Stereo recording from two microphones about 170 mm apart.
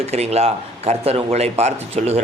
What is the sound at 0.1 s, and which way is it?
A man's voice, 40° right (ahead or behind).